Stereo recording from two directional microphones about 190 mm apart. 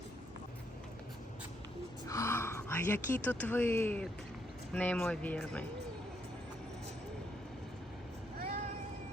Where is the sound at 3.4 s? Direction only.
10° left (ahead or behind).